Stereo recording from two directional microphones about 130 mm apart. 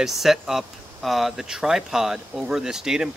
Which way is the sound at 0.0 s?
Centre (ahead or behind).